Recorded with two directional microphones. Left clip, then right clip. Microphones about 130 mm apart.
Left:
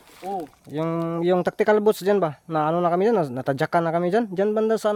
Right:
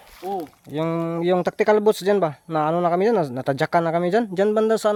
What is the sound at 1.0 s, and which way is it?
Speech, 5° left (ahead or behind).